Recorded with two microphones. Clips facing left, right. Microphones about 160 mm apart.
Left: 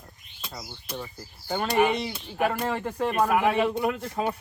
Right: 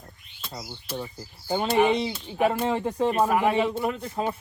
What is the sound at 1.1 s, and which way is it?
Speech, 15° right (ahead or behind).